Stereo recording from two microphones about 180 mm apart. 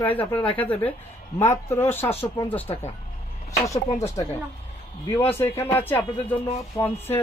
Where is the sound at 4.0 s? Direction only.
15° left (ahead or behind).